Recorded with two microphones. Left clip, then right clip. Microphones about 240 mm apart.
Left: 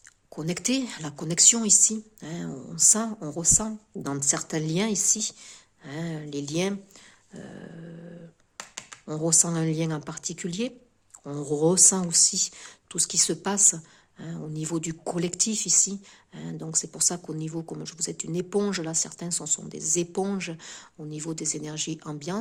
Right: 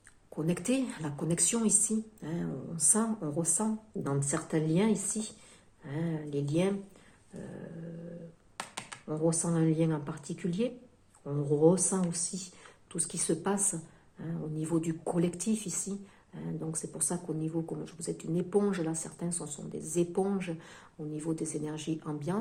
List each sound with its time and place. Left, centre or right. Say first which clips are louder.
0.3 s speech: left 3 dB; left
2.9 s a woman's voice: left 4 dB; left
3.2 s speech: left 7 dB; left
8.5 s a sound: even; centre
9.0 s speech: left 6 dB; left